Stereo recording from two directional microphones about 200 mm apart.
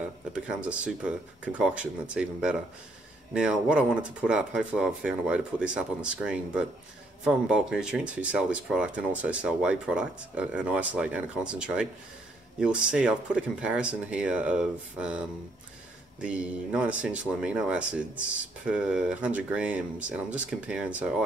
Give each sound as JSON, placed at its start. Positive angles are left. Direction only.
{"t": 0.7, "sound": "speech", "side_deg": -5}